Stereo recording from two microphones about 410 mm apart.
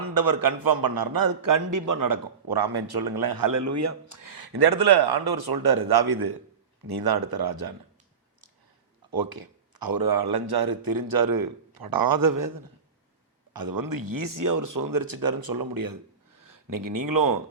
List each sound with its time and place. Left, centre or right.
0.0 s a man's voice: right
9.1 s a man's voice: right